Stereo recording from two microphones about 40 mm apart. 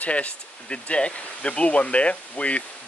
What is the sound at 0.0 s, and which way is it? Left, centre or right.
Speech, left.